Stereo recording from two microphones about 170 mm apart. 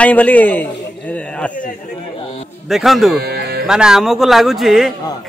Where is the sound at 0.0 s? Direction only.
10° left (ahead or behind).